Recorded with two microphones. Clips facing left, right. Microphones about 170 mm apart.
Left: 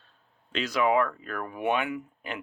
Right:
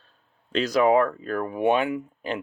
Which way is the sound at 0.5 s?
40° right (ahead or behind).